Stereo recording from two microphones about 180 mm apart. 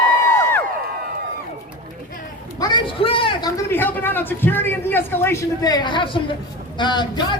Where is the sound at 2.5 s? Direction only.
25° left (ahead or behind).